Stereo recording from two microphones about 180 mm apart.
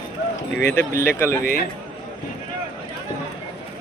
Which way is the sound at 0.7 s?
15° left (ahead or behind).